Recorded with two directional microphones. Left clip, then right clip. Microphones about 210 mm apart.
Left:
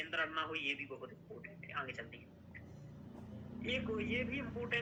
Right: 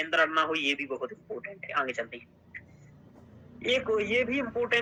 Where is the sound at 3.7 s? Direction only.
45° right (ahead or behind).